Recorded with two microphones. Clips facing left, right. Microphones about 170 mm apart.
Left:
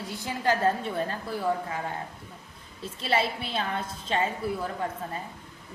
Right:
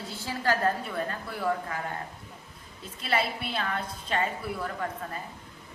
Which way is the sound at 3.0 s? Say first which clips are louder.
Left 2 dB; 25° left (ahead or behind).